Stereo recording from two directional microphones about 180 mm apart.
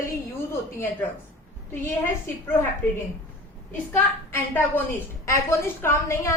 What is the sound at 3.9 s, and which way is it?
A woman's voice, 10° left (ahead or behind).